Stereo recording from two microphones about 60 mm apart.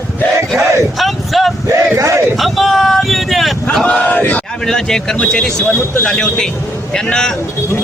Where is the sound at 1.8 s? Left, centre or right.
Right.